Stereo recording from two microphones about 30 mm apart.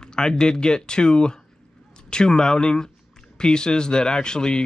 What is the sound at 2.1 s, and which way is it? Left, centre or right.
Speech, left.